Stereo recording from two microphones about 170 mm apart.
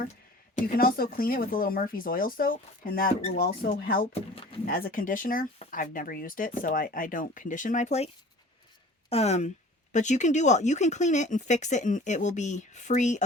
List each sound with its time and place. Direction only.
0.5 s speech: 60° left (ahead or behind)